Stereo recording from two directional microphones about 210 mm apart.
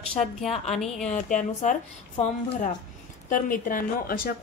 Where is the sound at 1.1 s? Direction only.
35° left (ahead or behind).